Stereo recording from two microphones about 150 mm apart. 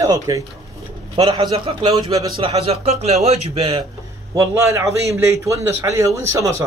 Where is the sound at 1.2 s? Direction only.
35° right (ahead or behind).